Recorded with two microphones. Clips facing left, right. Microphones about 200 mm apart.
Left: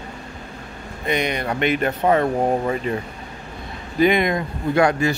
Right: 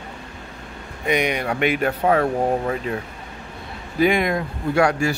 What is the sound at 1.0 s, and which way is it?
Speech, 10° right (ahead or behind).